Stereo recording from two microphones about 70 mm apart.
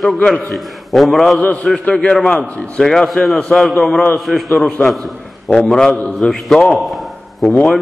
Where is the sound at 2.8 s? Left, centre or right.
Centre.